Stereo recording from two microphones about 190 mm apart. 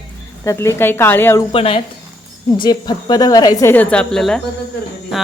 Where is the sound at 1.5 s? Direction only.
30° left (ahead or behind).